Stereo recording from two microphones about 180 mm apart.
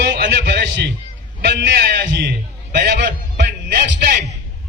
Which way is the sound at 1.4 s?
60° right (ahead or behind).